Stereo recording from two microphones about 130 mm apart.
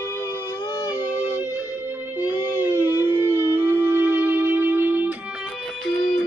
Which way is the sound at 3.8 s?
15° right (ahead or behind).